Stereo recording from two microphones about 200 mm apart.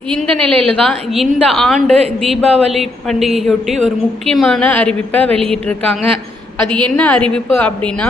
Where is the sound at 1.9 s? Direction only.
30° right (ahead or behind).